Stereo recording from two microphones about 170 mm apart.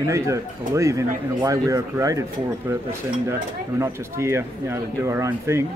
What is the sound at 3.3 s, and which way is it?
Speech, 15° right (ahead or behind).